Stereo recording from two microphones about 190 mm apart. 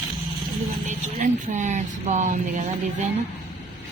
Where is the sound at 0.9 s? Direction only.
40° right (ahead or behind).